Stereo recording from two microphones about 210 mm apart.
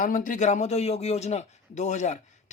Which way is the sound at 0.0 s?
40° left (ahead or behind).